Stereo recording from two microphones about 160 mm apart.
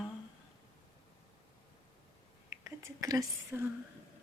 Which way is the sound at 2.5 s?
20° right (ahead or behind).